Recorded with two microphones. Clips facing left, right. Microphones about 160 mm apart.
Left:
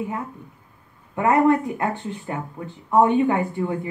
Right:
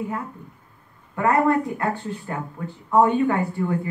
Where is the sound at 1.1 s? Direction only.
20° left (ahead or behind).